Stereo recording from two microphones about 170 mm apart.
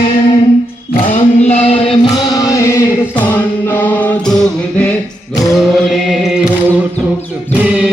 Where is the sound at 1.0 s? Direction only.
45° left (ahead or behind).